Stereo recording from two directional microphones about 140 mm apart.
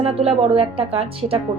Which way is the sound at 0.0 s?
45° right (ahead or behind).